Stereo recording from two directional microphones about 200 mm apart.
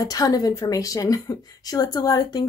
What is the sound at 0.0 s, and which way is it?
Speech, 20° left (ahead or behind).